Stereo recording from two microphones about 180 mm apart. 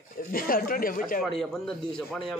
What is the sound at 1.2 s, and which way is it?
Speech, centre (ahead or behind).